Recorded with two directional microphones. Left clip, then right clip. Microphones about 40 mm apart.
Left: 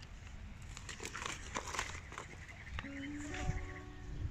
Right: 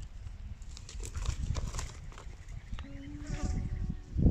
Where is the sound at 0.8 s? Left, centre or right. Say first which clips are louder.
Left 4 dB; left.